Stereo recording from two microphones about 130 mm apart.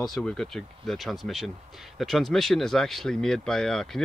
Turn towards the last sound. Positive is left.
turn(degrees=5)  # may be behind; listen again after turning